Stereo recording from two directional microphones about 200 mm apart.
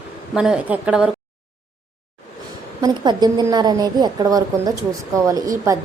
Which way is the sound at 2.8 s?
20° right (ahead or behind).